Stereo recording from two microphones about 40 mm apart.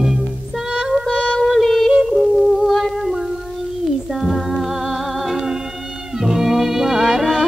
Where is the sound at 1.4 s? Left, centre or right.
Centre.